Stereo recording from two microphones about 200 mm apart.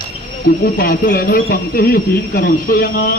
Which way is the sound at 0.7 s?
45° left (ahead or behind).